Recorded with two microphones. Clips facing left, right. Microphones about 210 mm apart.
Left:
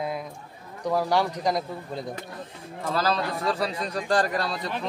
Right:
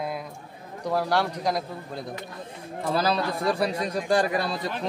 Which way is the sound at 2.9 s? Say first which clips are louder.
Right 1 dB; 15° right (ahead or behind).